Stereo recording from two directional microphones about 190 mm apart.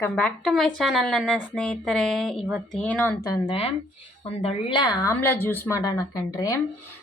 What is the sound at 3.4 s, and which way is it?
A woman's voice, 30° left (ahead or behind).